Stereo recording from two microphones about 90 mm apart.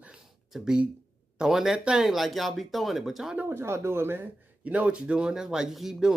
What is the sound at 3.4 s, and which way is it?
A man's voice, 25° right (ahead or behind).